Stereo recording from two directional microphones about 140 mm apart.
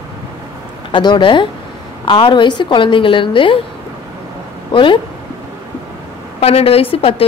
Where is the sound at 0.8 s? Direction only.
35° left (ahead or behind).